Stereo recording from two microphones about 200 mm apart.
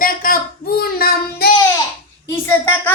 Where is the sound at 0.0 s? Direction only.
45° left (ahead or behind).